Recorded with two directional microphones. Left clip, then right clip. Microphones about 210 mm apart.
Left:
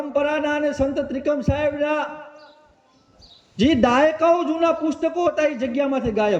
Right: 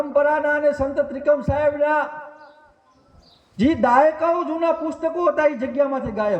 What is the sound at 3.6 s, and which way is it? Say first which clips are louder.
A man's voice: right 1 dB; 15° left (ahead or behind).